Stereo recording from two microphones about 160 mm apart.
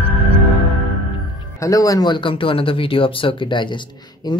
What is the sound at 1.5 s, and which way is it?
Speech, 20° left (ahead or behind).